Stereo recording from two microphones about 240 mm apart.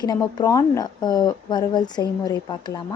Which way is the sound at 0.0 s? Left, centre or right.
Centre.